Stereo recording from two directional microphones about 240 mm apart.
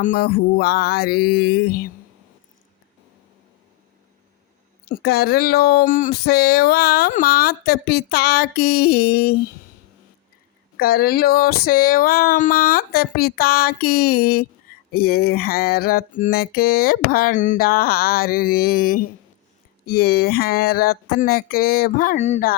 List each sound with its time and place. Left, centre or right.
0.0 s speech: left
4.9 s speech: left
10.8 s speech: left